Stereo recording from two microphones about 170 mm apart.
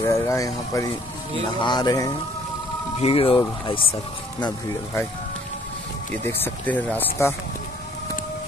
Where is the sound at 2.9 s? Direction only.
35° left (ahead or behind).